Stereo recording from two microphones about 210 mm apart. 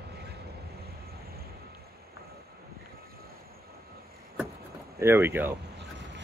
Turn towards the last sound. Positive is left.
turn(degrees=-10)  # may be behind; listen again after turning